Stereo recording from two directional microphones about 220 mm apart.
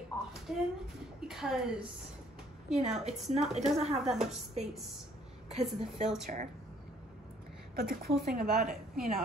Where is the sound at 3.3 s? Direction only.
30° right (ahead or behind).